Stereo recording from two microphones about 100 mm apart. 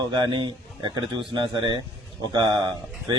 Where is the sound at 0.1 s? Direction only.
50° right (ahead or behind).